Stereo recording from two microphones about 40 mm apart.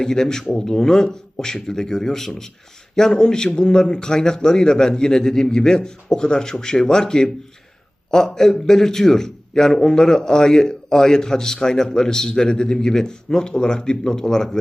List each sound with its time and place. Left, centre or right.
0.0 s a man's voice: centre